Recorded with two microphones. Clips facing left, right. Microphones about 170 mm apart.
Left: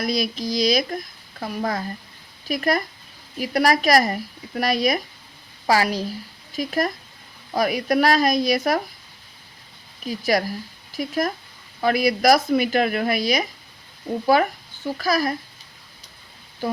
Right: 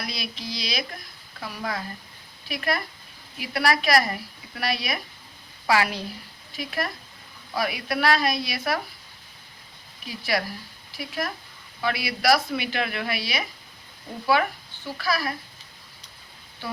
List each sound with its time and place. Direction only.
0.0 s speech: 45° left (ahead or behind)
10.1 s speech: 40° left (ahead or behind)